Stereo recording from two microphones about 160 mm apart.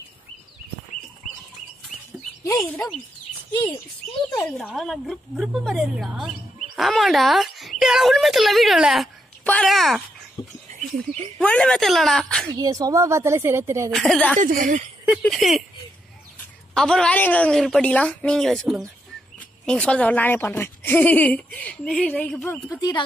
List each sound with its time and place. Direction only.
2.6 s a woman's voice: 5° left (ahead or behind)
4.3 s a woman's voice: 5° left (ahead or behind)
10.4 s speech: 35° left (ahead or behind)
11.4 s a woman's voice: 5° left (ahead or behind)
12.4 s speech: 25° right (ahead or behind)
13.9 s a woman's voice: centre (ahead or behind)
14.4 s speech: 50° right (ahead or behind)
15.0 s a woman's voice: centre (ahead or behind)
16.7 s a woman's voice: 5° left (ahead or behind)
22.7 s speech: 25° left (ahead or behind)